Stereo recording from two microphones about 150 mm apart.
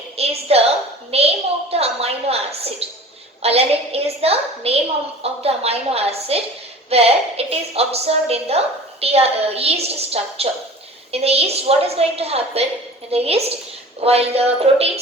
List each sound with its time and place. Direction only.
0.2 s a woman's voice: 40° right (ahead or behind)